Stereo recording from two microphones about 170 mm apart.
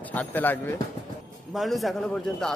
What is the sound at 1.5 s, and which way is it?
A man's voice, centre (ahead or behind).